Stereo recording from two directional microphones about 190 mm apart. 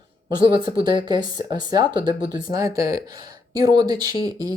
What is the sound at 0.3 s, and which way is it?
Speech, 25° right (ahead or behind).